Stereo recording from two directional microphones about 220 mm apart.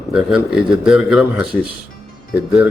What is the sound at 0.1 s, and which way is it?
Speech, 5° right (ahead or behind).